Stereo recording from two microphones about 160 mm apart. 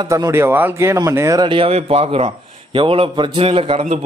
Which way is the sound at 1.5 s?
35° right (ahead or behind).